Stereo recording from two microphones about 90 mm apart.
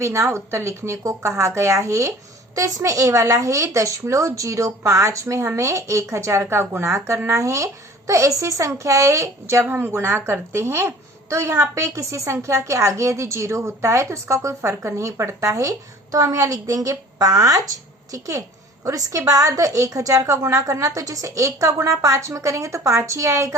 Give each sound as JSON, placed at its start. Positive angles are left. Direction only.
{"t": 0.0, "sound": "speech", "side_deg": -30}